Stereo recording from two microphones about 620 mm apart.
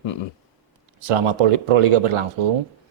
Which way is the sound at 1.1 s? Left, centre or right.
Right.